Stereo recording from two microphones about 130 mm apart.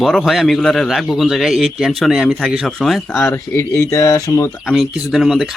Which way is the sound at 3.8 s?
25° left (ahead or behind).